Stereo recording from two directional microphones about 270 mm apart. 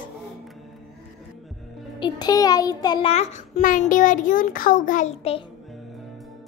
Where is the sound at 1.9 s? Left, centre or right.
Centre.